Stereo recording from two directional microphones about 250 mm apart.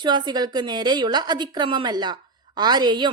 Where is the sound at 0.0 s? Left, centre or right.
Centre.